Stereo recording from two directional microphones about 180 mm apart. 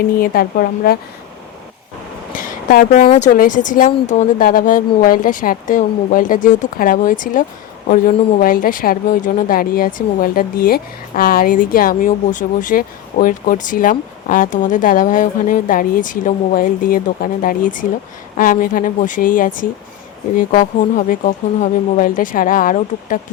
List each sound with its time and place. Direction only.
0.2 s a woman's voice: 55° left (ahead or behind)
2.3 s a sound: 50° left (ahead or behind)
3.1 s speech: 40° left (ahead or behind)